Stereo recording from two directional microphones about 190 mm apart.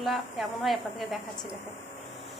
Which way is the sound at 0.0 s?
Centre (ahead or behind).